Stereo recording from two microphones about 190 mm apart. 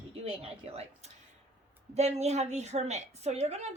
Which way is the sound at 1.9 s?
35° right (ahead or behind).